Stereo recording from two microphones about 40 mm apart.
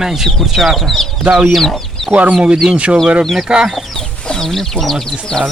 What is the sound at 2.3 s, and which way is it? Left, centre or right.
Speech, right.